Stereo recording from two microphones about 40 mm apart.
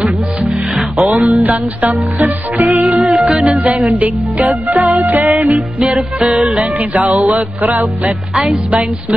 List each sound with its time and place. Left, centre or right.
0.0 s music: right
1.0 s music: right
3.0 s music: right